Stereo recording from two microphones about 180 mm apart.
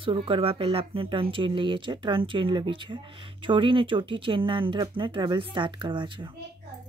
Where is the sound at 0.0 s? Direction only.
30° right (ahead or behind).